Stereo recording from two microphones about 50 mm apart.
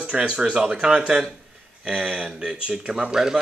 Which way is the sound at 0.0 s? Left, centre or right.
Centre.